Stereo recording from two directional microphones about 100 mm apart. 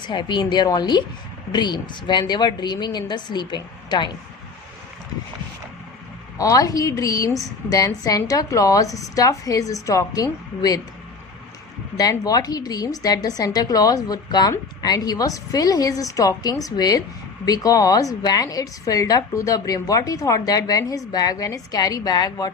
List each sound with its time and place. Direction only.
0.0 s a woman's voice: 50° left (ahead or behind)
6.3 s a woman's voice: 35° left (ahead or behind)
12.2 s a woman's voice: 40° left (ahead or behind)